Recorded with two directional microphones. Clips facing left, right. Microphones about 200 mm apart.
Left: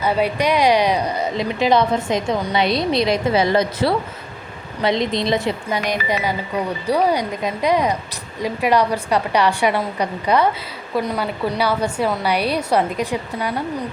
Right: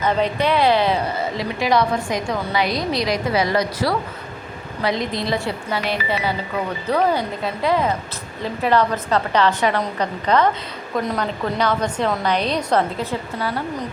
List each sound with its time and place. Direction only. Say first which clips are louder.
0.0 s a woman's voice: left 1 dB; 10° left (ahead or behind)